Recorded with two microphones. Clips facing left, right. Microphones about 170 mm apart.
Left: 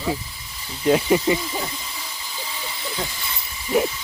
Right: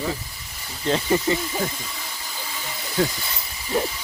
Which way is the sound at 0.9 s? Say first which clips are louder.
Left 3 dB; 15° left (ahead or behind).